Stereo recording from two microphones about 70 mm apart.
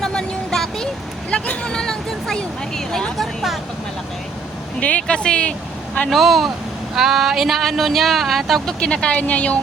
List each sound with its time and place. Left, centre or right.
0.0 s a sound: centre
1.3 s speech: centre
4.8 s speech: centre
6.1 s speech: centre
8.8 s speech: centre